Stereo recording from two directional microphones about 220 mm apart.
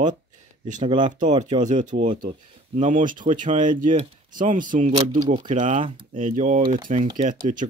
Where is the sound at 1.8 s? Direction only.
35° right (ahead or behind).